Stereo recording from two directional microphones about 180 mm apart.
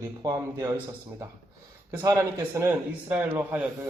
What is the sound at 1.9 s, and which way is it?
A man's voice, 15° right (ahead or behind).